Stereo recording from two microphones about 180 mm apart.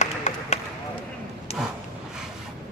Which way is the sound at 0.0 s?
40° left (ahead or behind).